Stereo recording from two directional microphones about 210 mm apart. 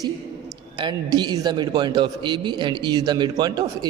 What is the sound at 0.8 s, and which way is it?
A man's voice, 20° right (ahead or behind).